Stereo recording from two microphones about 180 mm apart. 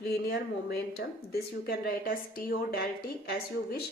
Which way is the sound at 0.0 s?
60° left (ahead or behind).